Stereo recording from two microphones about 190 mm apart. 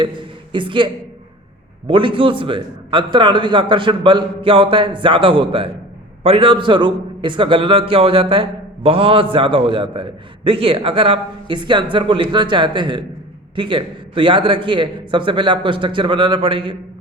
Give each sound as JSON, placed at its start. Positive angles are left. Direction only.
{"t": 0.0, "sound": "speech", "side_deg": -25}
{"t": 1.9, "sound": "a man's voice", "side_deg": -25}